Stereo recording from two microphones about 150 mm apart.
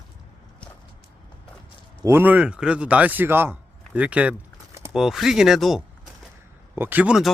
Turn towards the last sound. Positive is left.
turn(degrees=-5)  # may be behind; listen again after turning